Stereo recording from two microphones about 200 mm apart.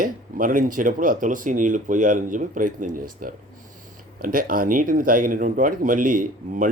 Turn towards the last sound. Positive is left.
turn(degrees=-45)  # may be behind; listen again after turning